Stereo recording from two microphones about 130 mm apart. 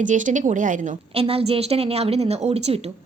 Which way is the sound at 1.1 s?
50° right (ahead or behind).